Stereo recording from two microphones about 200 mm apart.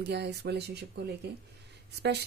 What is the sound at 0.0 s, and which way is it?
Speech, 55° right (ahead or behind).